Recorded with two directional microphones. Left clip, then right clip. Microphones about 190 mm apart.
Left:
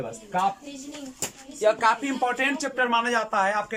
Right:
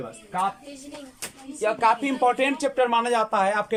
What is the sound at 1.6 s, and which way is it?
Speech, 10° right (ahead or behind).